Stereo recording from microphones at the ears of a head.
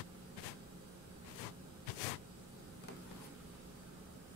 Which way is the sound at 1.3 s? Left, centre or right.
Left.